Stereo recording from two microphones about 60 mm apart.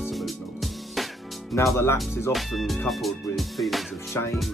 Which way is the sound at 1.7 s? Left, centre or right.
Left.